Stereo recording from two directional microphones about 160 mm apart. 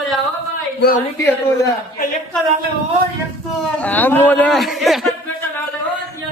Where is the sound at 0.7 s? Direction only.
75° left (ahead or behind).